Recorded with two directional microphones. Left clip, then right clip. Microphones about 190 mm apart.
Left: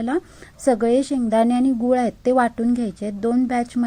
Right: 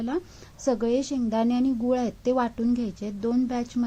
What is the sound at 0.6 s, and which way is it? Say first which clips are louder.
A woman's voice: left 7 dB; 20° left (ahead or behind).